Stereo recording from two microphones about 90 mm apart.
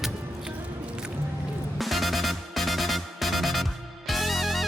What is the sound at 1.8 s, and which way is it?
Music, centre (ahead or behind).